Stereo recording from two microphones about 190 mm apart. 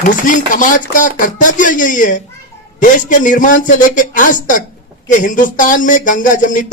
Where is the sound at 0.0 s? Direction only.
45° left (ahead or behind).